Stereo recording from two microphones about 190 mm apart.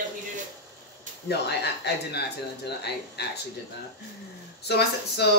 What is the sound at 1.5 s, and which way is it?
Speech, 60° left (ahead or behind).